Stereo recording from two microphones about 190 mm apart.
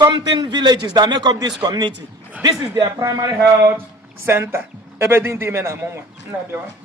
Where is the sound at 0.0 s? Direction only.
25° right (ahead or behind).